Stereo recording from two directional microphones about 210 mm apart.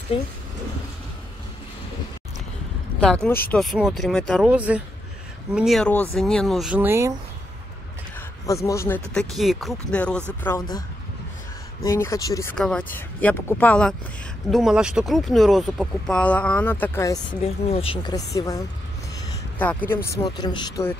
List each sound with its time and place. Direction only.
0.1 s speech: 25° left (ahead or behind)
3.0 s speech: 5° left (ahead or behind)
8.5 s speech: 15° left (ahead or behind)
11.8 s speech: 15° left (ahead or behind)
12.5 s speech: 5° left (ahead or behind)
17.6 s speech: 25° left (ahead or behind)
19.6 s speech: 5° left (ahead or behind)